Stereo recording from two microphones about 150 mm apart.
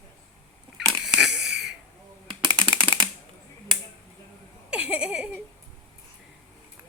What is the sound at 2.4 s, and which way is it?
Typing, 30° right (ahead or behind).